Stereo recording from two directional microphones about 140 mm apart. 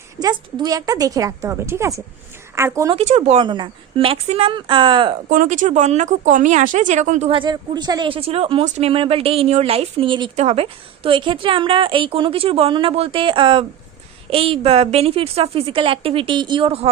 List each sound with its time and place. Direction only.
0.2 s a woman's voice: 30° right (ahead or behind)
2.9 s a woman's voice: 50° right (ahead or behind)
5.3 s speech: 70° right (ahead or behind)
7.3 s a woman's voice: 35° right (ahead or behind)
10.3 s a woman's voice: 50° right (ahead or behind)